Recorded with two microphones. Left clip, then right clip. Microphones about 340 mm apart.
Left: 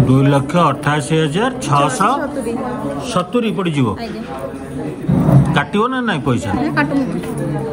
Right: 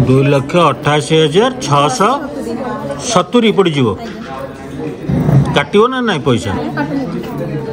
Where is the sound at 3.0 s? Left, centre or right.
Centre.